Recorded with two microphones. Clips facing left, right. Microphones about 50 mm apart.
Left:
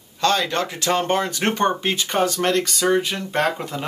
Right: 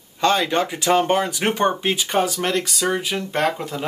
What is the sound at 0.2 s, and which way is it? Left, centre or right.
Speech, centre.